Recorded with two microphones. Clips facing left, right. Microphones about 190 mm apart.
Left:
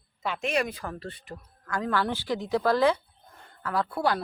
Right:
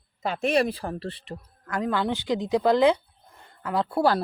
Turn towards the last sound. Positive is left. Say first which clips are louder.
# right 4 dB
turn(degrees=-30)  # may be behind; listen again after turning